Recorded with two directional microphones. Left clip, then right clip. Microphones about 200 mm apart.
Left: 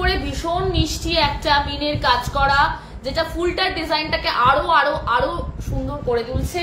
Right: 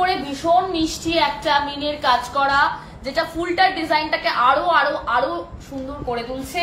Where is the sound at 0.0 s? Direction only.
30° left (ahead or behind).